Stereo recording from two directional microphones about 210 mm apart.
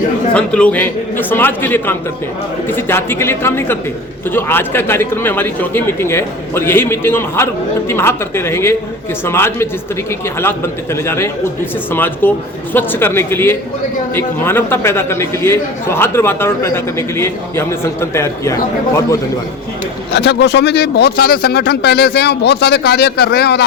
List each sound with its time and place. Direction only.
0.3 s a man's voice: 5° left (ahead or behind)
20.1 s speech: 55° left (ahead or behind)